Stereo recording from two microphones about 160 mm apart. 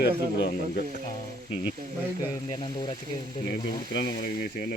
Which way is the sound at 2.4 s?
30° left (ahead or behind).